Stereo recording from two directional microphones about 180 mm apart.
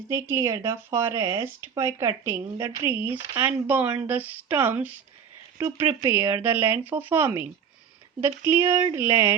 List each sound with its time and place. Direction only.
0.1 s speech: 15° right (ahead or behind)